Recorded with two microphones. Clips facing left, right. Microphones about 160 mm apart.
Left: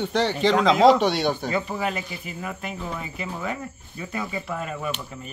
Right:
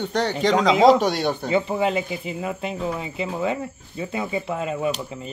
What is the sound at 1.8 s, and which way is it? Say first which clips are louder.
A man's voice: right 6 dB; 25° right (ahead or behind).